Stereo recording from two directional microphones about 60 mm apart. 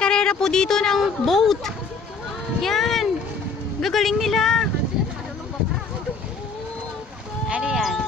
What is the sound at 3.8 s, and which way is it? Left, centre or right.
Speech, centre.